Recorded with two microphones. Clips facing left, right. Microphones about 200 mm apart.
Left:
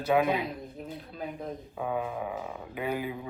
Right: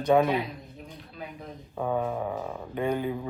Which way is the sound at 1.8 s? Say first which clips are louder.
Right 4 dB; 5° left (ahead or behind).